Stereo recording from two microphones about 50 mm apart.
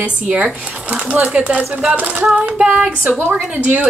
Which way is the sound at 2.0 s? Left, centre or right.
Right.